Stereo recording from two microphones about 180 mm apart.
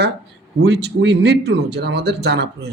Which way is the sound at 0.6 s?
70° right (ahead or behind).